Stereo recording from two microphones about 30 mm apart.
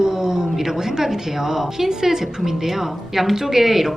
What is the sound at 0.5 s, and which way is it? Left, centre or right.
Speech, centre.